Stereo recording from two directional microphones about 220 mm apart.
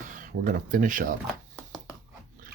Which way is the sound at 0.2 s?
35° right (ahead or behind).